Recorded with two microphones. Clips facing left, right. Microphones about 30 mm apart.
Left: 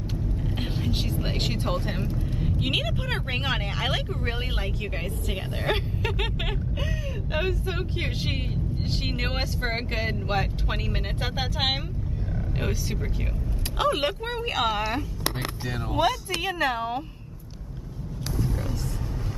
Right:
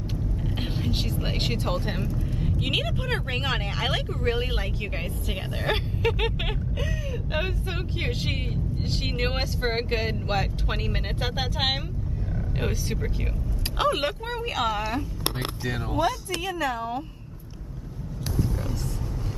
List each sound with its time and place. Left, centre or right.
0.4 s vehicle: centre
2.6 s speech: centre
14.3 s speech: centre
16.4 s speech: left